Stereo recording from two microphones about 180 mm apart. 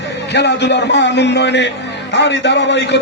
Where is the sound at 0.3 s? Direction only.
70° left (ahead or behind).